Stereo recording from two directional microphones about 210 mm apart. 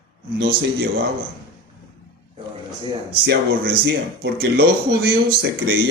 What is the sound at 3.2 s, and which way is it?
A man's voice, 50° right (ahead or behind).